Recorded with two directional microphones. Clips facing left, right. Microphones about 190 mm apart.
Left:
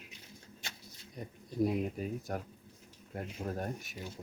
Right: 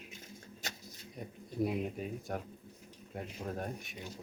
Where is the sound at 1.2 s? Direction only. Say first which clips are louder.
Left 3 dB; centre (ahead or behind).